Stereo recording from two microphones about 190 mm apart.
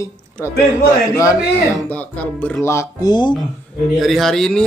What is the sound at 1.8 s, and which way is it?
Speech, 10° left (ahead or behind).